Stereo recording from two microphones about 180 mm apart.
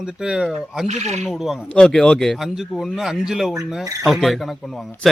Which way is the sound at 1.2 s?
Centre (ahead or behind).